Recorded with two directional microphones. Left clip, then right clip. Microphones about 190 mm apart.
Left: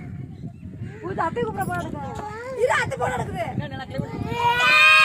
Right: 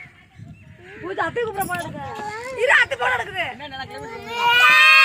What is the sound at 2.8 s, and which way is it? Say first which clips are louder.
Speech: right 5 dB; 20° left (ahead or behind).